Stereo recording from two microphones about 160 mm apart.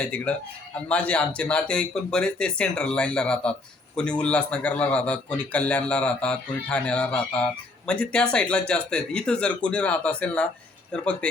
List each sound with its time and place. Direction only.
0.0 s a man's voice: 5° left (ahead or behind)